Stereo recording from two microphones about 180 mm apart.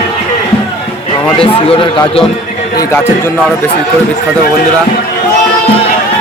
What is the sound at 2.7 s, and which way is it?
Speech, 15° left (ahead or behind).